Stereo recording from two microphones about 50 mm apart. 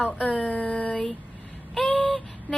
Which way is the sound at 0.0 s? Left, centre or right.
Left.